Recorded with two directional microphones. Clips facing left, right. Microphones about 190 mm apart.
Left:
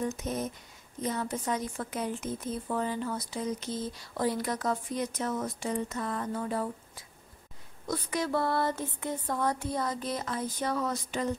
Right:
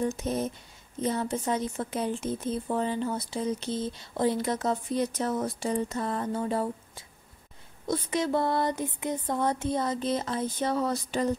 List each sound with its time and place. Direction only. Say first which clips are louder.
0.0 s speech: right 4 dB; 30° right (ahead or behind)